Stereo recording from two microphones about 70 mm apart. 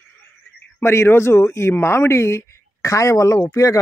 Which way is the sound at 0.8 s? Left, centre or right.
Left.